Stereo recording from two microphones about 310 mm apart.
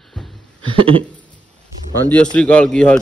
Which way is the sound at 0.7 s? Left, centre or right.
Centre.